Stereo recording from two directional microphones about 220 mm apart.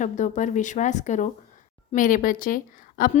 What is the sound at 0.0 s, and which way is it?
A woman's voice, 35° left (ahead or behind).